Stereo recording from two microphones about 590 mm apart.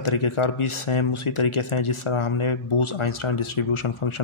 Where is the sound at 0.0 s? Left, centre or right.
Left.